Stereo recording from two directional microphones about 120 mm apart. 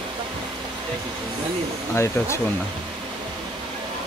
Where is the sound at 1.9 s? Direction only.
20° left (ahead or behind).